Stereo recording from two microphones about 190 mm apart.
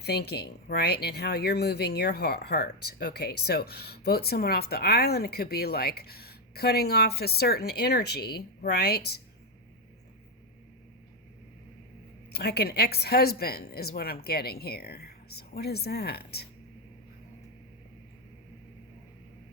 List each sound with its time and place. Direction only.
0.0 s speech: 60° left (ahead or behind)
12.3 s speech: 60° left (ahead or behind)